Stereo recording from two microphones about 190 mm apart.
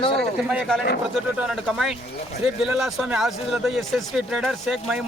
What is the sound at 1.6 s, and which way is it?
Speech, 5° right (ahead or behind).